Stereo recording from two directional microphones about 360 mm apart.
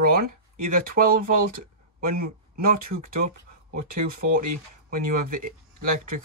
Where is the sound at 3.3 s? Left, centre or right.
Right.